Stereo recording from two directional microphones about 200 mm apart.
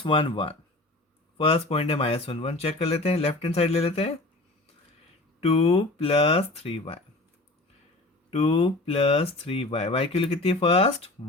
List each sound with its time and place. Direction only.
0.0 s speech: 25° left (ahead or behind)
5.4 s speech: 30° left (ahead or behind)
8.3 s speech: 30° left (ahead or behind)